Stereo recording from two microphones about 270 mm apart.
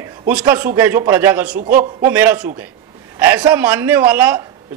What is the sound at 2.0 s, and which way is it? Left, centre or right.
A man's voice, centre.